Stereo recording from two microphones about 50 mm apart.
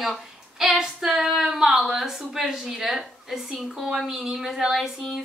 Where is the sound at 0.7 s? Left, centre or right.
Centre.